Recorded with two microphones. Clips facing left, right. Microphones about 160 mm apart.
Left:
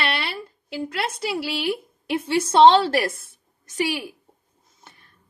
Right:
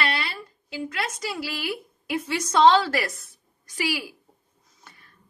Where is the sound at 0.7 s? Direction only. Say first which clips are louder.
Left 3 dB; 30° left (ahead or behind).